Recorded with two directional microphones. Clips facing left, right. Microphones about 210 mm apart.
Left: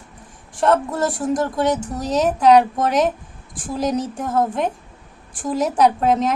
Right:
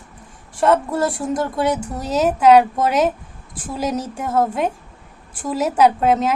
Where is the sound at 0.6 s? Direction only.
5° right (ahead or behind).